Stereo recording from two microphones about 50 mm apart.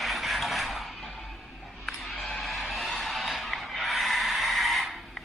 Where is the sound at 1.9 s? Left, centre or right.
Centre.